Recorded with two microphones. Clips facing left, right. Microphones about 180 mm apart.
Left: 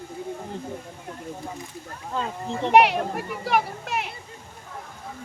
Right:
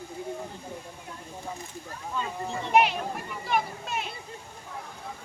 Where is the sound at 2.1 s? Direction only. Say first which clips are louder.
Left 3 dB; 75° left (ahead or behind).